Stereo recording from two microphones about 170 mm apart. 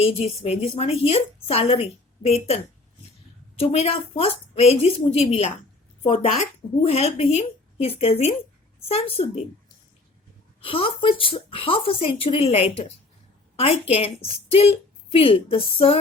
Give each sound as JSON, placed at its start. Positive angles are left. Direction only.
{"t": 0.0, "sound": "a woman's voice", "side_deg": 35}
{"t": 10.6, "sound": "a woman's voice", "side_deg": 30}